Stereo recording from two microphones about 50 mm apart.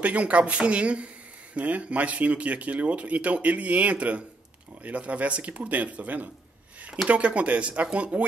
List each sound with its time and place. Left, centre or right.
0.0 s speech: right